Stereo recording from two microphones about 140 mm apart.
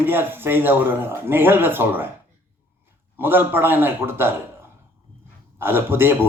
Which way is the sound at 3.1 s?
15° right (ahead or behind).